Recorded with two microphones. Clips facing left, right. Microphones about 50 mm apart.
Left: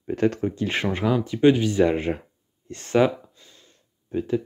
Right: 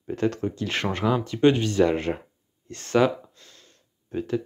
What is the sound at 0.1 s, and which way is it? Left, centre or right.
Speech, left.